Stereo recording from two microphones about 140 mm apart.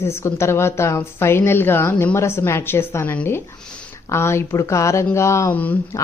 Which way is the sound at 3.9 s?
20° left (ahead or behind).